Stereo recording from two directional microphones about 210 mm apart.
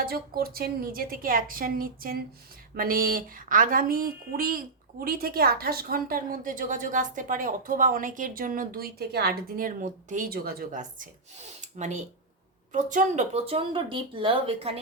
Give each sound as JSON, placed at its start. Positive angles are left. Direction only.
{"t": 0.0, "sound": "a woman's voice", "side_deg": -45}